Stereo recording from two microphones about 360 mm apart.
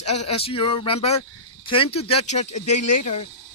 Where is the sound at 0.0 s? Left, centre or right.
Centre.